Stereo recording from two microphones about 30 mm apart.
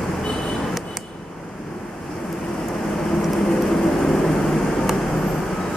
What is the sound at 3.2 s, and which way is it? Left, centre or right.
Vehicle, centre.